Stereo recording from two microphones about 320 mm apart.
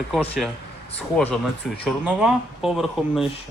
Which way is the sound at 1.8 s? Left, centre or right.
Centre.